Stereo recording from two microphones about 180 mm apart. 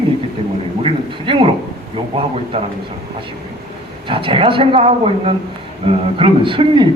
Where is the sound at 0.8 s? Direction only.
30° right (ahead or behind).